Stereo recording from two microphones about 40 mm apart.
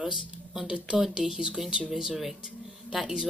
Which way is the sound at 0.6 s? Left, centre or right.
Right.